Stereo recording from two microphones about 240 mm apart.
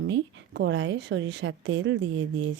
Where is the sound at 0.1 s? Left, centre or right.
Right.